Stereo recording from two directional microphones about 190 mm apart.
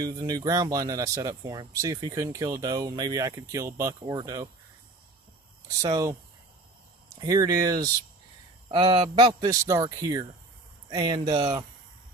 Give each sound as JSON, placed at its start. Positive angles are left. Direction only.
{"t": 0.0, "sound": "speech", "side_deg": -20}
{"t": 5.8, "sound": "speech", "side_deg": -20}
{"t": 7.2, "sound": "speech", "side_deg": -20}